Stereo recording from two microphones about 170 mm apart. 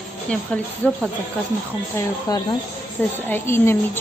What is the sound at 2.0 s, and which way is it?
A woman's voice, 20° left (ahead or behind).